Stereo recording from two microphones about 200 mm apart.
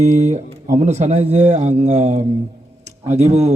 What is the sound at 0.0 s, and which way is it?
A man's voice, 35° right (ahead or behind).